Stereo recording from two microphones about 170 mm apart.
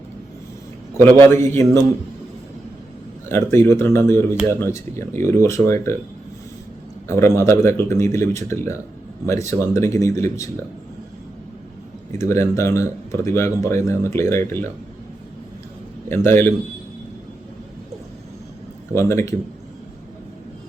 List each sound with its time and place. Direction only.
1.0 s speech: 10° left (ahead or behind)
3.2 s speech: 15° left (ahead or behind)
7.1 s speech: 15° left (ahead or behind)
12.1 s speech: 15° left (ahead or behind)
16.0 s speech: 15° left (ahead or behind)
18.9 s speech: 15° left (ahead or behind)